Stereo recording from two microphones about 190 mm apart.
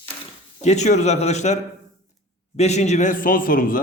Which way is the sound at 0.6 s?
35° left (ahead or behind).